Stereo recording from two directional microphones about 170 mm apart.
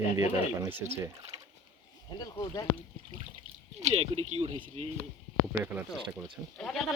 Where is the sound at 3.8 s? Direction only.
40° right (ahead or behind).